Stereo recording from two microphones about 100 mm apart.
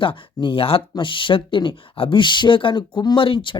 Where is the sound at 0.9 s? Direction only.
55° left (ahead or behind).